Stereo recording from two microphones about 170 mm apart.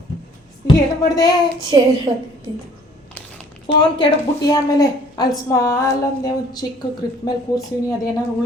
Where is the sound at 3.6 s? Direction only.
30° left (ahead or behind).